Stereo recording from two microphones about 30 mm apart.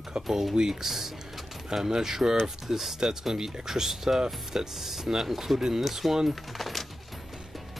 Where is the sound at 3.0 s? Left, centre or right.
Centre.